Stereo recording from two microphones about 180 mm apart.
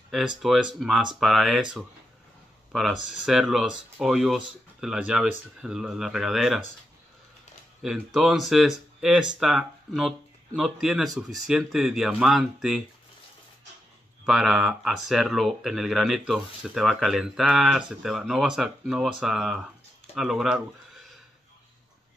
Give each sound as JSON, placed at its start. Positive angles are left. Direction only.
{"t": 0.1, "sound": "speech", "side_deg": 0}
{"t": 7.8, "sound": "speech", "side_deg": 0}
{"t": 14.2, "sound": "speech", "side_deg": 0}